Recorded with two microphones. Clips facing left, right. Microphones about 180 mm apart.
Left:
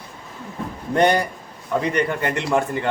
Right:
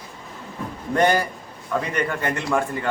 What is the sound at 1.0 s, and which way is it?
A man's voice, 20° left (ahead or behind).